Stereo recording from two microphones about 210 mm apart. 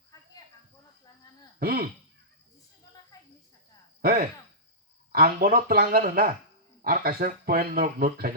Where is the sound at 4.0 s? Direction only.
45° right (ahead or behind).